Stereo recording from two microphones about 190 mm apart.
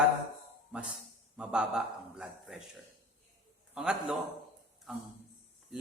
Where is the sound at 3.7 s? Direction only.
5° right (ahead or behind).